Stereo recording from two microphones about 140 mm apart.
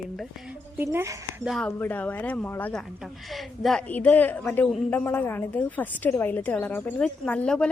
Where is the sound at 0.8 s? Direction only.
15° right (ahead or behind).